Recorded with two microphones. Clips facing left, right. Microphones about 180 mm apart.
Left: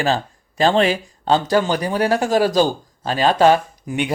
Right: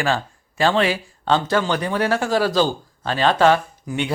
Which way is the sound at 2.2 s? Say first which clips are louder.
Left 3 dB; 15° left (ahead or behind).